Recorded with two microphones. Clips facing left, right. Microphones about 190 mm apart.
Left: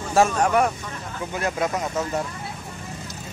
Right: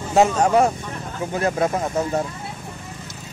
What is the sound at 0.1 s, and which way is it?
Speech, 25° right (ahead or behind).